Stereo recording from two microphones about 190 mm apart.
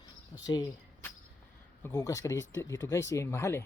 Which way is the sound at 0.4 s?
20° left (ahead or behind).